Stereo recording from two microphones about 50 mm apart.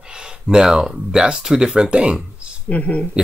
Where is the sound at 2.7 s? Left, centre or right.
Left.